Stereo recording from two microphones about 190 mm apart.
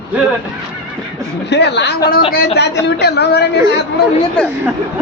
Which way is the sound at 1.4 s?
60° left (ahead or behind).